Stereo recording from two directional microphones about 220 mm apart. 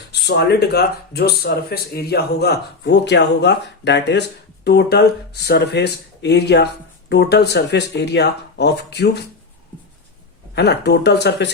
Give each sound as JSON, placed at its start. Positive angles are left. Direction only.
{"t": 0.1, "sound": "speech", "side_deg": 50}
{"t": 10.5, "sound": "speech", "side_deg": 50}